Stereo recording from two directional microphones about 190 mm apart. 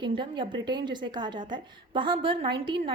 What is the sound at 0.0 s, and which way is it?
A woman's voice, 25° right (ahead or behind).